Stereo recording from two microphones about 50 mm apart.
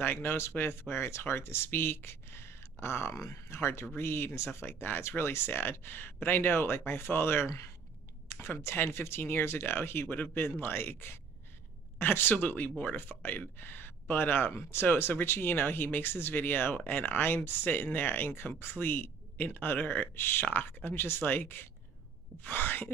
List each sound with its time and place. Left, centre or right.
0.0 s speech: left
13.6 s speech: left
14.5 s speech: left
14.9 s speech: left